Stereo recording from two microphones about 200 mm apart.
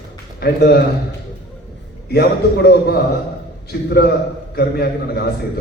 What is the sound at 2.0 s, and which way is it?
A man's voice, 55° left (ahead or behind).